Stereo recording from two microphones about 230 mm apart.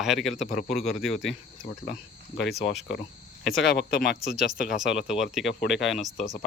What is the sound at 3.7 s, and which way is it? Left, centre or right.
Speech, left.